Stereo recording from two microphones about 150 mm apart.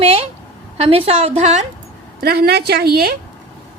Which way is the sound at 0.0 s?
40° right (ahead or behind).